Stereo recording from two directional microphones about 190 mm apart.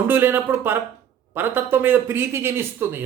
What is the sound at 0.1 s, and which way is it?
A man's voice, 10° right (ahead or behind).